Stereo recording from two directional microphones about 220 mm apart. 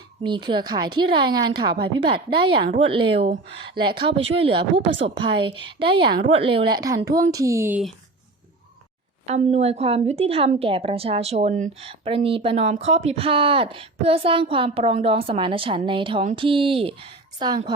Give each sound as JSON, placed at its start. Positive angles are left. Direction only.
{"t": 0.3, "sound": "a woman's voice", "side_deg": -20}
{"t": 9.2, "sound": "a woman's voice", "side_deg": -30}